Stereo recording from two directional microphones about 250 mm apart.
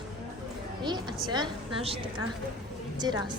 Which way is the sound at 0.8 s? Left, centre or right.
Centre.